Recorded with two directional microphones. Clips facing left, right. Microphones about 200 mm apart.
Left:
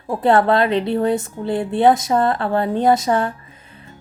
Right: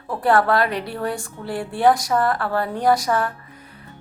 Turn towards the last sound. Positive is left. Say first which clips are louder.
# left 3 dB
turn(degrees=25)  # may be behind; listen again after turning